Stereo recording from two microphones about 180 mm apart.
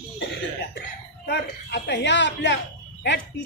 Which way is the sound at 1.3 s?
70° left (ahead or behind).